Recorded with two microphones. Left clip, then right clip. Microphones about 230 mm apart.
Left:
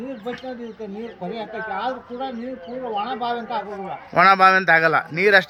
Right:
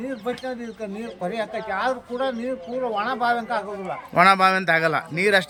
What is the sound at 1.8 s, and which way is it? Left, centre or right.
Speech, right.